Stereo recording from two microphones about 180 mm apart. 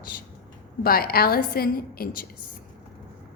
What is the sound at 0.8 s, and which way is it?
A woman's voice, 55° left (ahead or behind).